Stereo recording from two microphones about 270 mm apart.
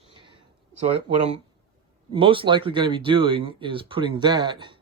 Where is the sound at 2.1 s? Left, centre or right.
Centre.